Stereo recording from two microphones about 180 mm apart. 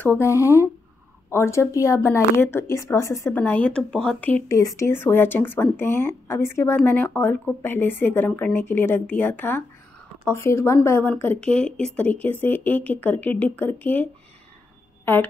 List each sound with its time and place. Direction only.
0.0 s speech: 15° left (ahead or behind)
15.1 s speech: 10° left (ahead or behind)